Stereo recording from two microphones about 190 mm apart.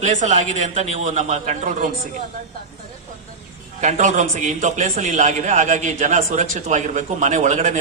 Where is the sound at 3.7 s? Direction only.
40° right (ahead or behind).